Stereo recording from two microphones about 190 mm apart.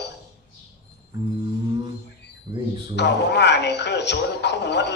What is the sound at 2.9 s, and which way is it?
Speech, 65° left (ahead or behind).